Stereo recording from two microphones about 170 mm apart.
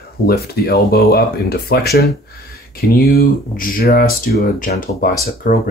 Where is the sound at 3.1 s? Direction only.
60° left (ahead or behind).